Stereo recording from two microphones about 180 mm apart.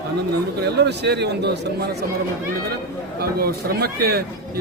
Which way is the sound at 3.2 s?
60° right (ahead or behind).